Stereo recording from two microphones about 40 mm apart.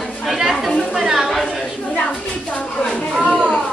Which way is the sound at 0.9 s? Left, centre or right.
Centre.